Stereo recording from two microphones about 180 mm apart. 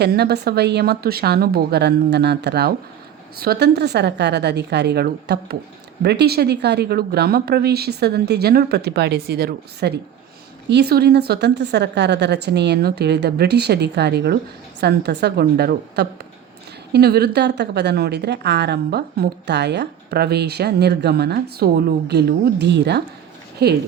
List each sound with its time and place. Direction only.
0.0 s a woman's voice: 65° right (ahead or behind)